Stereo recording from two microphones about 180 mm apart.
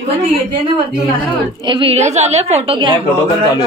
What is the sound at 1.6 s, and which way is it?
A woman's voice, 25° right (ahead or behind).